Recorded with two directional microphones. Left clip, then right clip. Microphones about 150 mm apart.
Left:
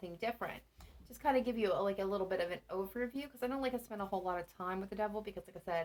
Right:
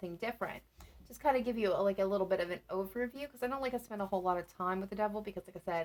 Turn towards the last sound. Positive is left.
turn(degrees=-40)  # may be behind; listen again after turning